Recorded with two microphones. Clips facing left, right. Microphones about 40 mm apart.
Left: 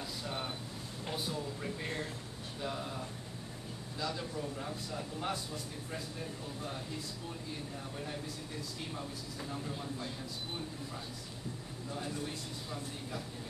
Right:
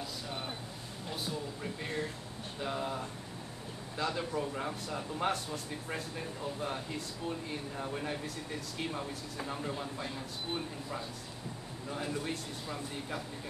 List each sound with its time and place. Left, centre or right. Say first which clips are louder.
1.1 s speech: even; centre
2.6 s speech: right 4 dB; centre
4.0 s a man's voice: right 4 dB; right
7.8 s a man's voice: right 5 dB; right